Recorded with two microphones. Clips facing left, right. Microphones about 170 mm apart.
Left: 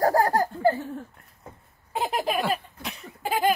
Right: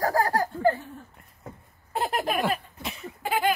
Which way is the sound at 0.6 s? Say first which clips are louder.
Right 1 dB; 25° left (ahead or behind).